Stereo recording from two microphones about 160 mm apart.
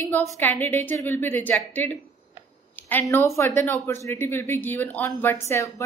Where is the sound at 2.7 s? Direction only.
10° left (ahead or behind).